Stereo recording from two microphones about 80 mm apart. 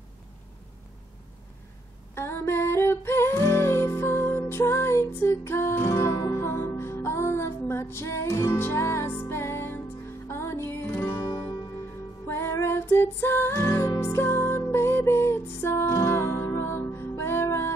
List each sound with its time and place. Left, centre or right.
2.1 s music: left
6.4 s music: left
12.3 s music: left